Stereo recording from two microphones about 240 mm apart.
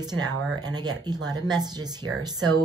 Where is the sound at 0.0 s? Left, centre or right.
Centre.